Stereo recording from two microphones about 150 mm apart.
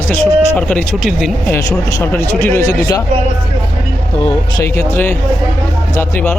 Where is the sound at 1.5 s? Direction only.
15° left (ahead or behind).